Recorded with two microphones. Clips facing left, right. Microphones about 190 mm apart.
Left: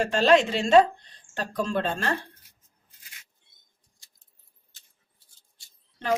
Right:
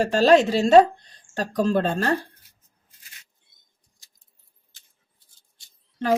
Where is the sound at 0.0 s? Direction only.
40° right (ahead or behind).